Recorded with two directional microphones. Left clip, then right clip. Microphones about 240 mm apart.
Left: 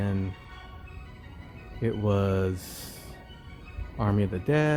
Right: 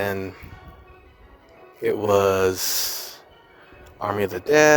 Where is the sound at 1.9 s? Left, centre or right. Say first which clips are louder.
Right 10 dB; right.